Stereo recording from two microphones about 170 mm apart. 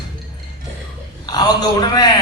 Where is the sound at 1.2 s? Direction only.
25° left (ahead or behind).